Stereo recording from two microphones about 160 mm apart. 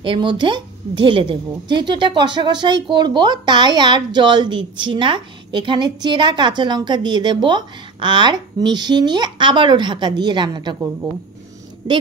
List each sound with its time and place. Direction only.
0.0 s a woman's voice: 30° right (ahead or behind)